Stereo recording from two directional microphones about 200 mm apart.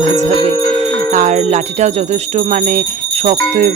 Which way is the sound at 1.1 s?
40° right (ahead or behind).